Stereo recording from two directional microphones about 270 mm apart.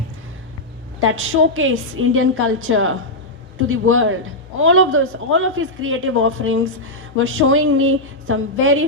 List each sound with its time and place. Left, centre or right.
0.9 s a man's voice: right